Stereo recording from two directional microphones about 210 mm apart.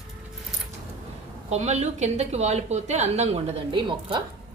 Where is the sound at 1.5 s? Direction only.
30° right (ahead or behind).